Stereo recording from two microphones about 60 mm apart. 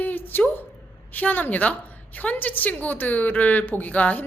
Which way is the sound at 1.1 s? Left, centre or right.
Left.